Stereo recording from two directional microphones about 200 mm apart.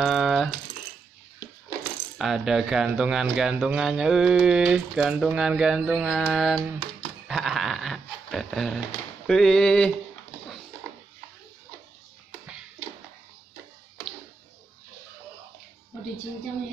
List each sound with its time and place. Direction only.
0.0 s rattle: centre (ahead or behind)
2.1 s speech: centre (ahead or behind)
7.2 s a sound: centre (ahead or behind)
9.3 s speech: 5° left (ahead or behind)